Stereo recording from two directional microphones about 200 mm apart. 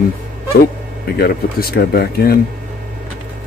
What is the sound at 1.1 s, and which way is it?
Speech, 50° left (ahead or behind).